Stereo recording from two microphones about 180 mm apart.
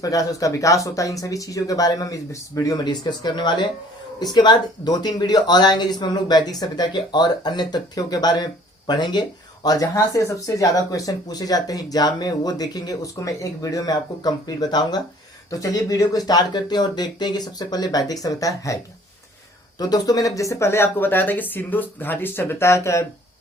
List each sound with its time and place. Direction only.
0.0 s speech: 20° left (ahead or behind)
19.8 s speech: 20° left (ahead or behind)